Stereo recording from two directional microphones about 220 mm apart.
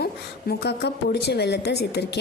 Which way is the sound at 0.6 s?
50° left (ahead or behind).